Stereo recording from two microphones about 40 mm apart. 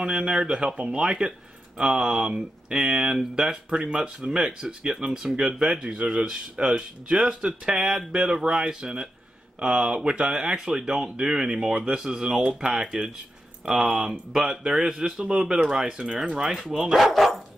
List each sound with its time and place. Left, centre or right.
0.0 s speech: right
9.6 s speech: right; by 17.3 s centre